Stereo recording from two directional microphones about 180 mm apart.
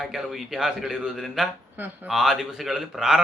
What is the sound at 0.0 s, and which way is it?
Speech, centre (ahead or behind).